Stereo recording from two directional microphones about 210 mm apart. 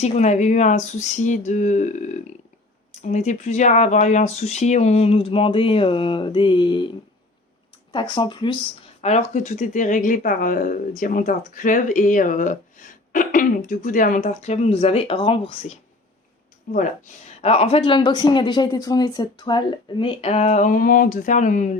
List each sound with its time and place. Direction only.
0.0 s speech: 35° left (ahead or behind)
7.9 s speech: 20° left (ahead or behind)
9.0 s speech: 30° left (ahead or behind)
16.7 s speech: 40° left (ahead or behind)
17.4 s speech: 30° left (ahead or behind)